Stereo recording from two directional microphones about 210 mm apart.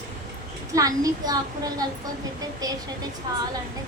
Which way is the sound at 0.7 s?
15° right (ahead or behind).